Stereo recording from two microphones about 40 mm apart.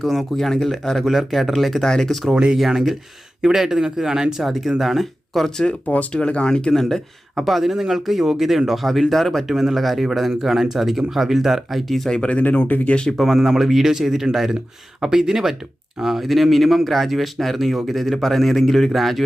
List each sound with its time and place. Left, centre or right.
0.0 s speech: centre
1.0 s speech: centre
2.3 s speech: right
2.6 s speech: centre
5.8 s speech: left
6.1 s speech: left
6.8 s speech: centre
7.4 s speech: centre
9.5 s speech: centre
12.2 s speech: left
12.6 s speech: left
13.2 s speech: centre